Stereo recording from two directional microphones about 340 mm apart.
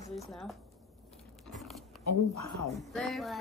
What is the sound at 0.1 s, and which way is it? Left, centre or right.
Music, centre.